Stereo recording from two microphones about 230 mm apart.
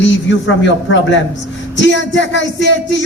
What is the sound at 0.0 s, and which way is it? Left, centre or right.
A man's voice, left.